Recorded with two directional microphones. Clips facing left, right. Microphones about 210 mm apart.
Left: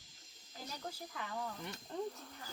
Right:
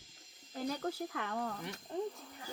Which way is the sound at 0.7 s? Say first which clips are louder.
Right 9 dB; 65° right (ahead or behind).